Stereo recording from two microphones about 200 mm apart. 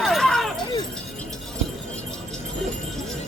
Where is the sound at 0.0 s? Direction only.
Centre (ahead or behind).